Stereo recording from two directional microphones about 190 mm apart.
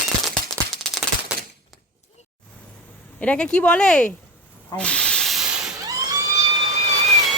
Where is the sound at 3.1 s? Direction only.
5° left (ahead or behind).